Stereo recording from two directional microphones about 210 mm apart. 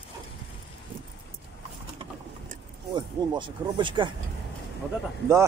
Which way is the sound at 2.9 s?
20° right (ahead or behind).